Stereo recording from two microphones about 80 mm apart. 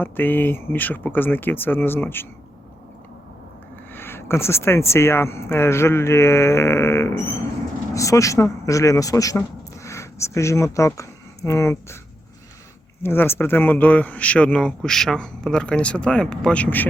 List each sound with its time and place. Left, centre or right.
0.0 s speech: left
3.9 s speech: left
13.0 s speech: left; by 16.6 s centre